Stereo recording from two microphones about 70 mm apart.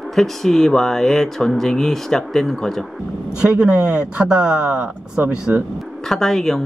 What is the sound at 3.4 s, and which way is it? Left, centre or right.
Speech, centre.